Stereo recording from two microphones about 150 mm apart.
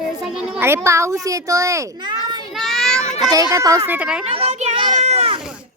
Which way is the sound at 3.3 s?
20° right (ahead or behind).